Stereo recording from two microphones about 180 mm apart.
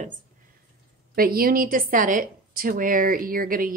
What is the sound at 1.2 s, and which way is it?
A woman's voice, 55° right (ahead or behind).